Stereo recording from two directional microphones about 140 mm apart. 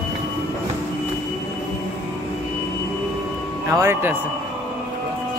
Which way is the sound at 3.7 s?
20° right (ahead or behind).